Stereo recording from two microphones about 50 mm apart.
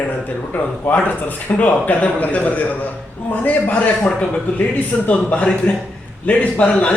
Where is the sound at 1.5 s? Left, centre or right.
Left.